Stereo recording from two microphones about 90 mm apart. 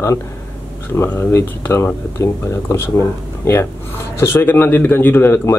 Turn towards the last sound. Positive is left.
turn(degrees=25)  # may be behind; listen again after turning